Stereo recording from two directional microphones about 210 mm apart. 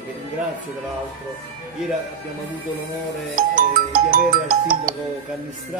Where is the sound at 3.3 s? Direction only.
40° right (ahead or behind).